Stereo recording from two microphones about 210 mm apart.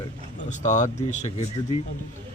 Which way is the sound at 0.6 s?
35° left (ahead or behind).